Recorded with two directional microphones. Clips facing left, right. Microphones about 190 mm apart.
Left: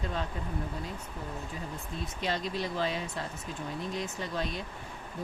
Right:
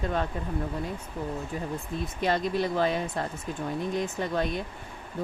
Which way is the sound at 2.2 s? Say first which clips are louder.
Right 7 dB; 55° right (ahead or behind).